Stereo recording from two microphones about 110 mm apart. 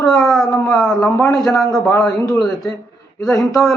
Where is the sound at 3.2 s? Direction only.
5° left (ahead or behind).